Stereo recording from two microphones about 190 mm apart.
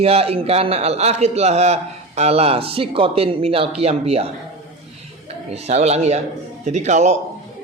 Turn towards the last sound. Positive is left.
turn(degrees=-35)  # may be behind; listen again after turning